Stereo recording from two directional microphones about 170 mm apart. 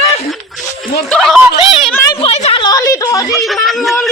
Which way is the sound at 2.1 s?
35° left (ahead or behind).